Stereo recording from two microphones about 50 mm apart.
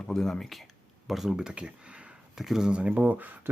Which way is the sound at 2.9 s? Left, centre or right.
Right.